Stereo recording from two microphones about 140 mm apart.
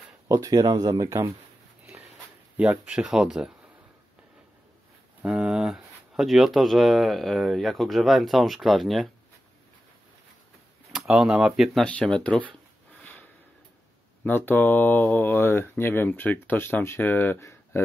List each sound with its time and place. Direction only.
0.3 s speech: 25° right (ahead or behind)
2.5 s speech: 10° right (ahead or behind)
5.2 s speech: 5° right (ahead or behind)
10.9 s speech: 5° right (ahead or behind)
14.2 s speech: 15° left (ahead or behind)